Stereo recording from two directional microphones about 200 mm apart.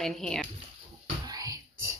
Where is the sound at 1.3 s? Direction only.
15° right (ahead or behind).